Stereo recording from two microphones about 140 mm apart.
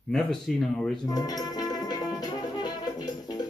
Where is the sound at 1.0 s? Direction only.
30° left (ahead or behind).